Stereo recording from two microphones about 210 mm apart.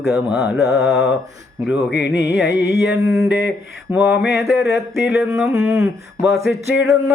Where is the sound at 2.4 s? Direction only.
50° left (ahead or behind).